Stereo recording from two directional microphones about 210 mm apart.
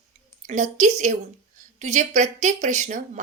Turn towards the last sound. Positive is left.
turn(degrees=-35)  # may be behind; listen again after turning